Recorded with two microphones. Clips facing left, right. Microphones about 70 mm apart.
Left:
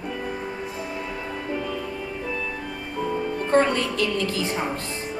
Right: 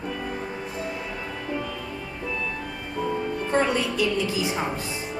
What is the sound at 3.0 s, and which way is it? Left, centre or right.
A woman's voice, centre.